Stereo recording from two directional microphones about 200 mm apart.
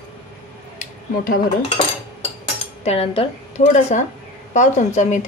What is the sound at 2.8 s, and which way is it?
A woman's voice, 30° left (ahead or behind).